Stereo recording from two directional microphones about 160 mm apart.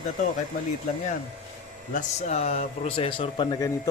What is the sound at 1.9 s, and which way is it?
Speech, 45° left (ahead or behind).